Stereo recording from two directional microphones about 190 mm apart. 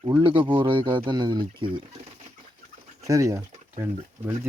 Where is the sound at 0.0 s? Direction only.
25° right (ahead or behind).